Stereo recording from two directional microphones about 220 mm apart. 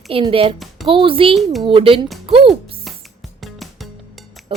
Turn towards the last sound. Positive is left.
turn(degrees=0)  # may be behind; listen again after turning